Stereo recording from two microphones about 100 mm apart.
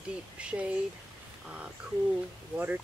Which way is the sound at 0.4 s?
10° right (ahead or behind).